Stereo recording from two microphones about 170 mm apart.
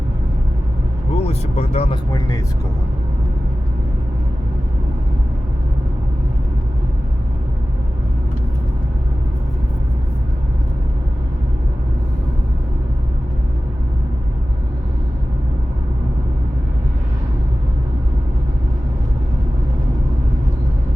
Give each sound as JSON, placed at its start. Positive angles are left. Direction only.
{"t": 1.1, "sound": "speech", "side_deg": 40}